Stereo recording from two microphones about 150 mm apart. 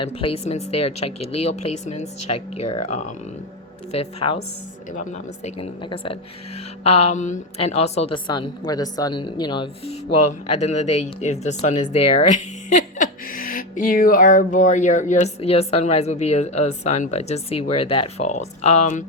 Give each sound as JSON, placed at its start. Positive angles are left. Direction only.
{"t": 0.0, "sound": "speech", "side_deg": 35}
{"t": 3.9, "sound": "a woman's voice", "side_deg": 40}
{"t": 4.9, "sound": "speech", "side_deg": 50}
{"t": 5.8, "sound": "a woman's voice", "side_deg": 35}
{"t": 8.3, "sound": "a woman's voice", "side_deg": 25}
{"t": 10.6, "sound": "speech", "side_deg": 50}
{"t": 12.7, "sound": "speech", "side_deg": 65}